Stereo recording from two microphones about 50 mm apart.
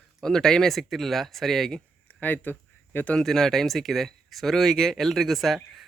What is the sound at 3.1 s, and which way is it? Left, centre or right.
Speech, centre.